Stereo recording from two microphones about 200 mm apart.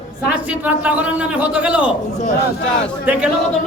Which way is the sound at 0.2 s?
5° right (ahead or behind).